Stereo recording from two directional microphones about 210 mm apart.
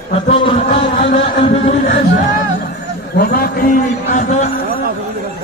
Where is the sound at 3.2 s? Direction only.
45° left (ahead or behind).